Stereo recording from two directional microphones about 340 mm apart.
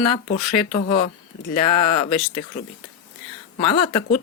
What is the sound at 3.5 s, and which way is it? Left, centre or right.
Speech, centre.